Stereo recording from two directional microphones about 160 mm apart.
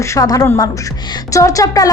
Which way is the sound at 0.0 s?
20° left (ahead or behind).